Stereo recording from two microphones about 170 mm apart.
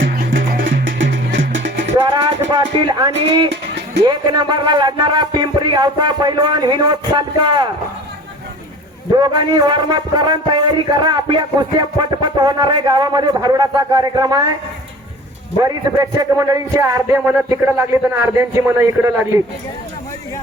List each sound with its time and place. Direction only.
0.0 s music: 55° right (ahead or behind)
0.9 s music: 90° right
2.0 s speech: 25° right (ahead or behind)
3.5 s music: 80° right
4.0 s a man's voice: 25° right (ahead or behind)
9.1 s a man's voice: 25° right (ahead or behind)
15.6 s speech: 20° right (ahead or behind)